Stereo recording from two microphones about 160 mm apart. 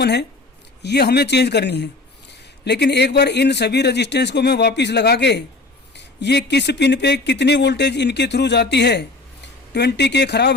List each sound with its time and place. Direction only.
0.0 s speech: 90° left